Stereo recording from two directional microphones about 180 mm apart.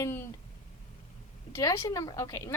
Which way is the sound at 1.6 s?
20° left (ahead or behind).